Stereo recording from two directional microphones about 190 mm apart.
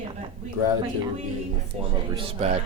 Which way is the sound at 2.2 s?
30° right (ahead or behind).